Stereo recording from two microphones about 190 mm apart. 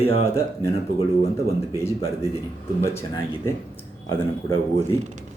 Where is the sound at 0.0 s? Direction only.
30° left (ahead or behind).